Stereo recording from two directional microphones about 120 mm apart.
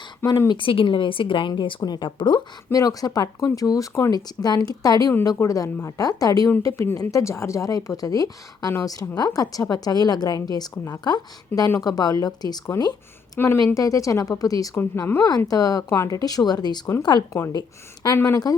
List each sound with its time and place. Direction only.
0.3 s a woman's voice: 35° left (ahead or behind)
2.7 s a woman's voice: 30° left (ahead or behind)
13.4 s speech: 20° left (ahead or behind)
14.8 s a woman's voice: 15° left (ahead or behind)
15.4 s a woman's voice: 30° left (ahead or behind)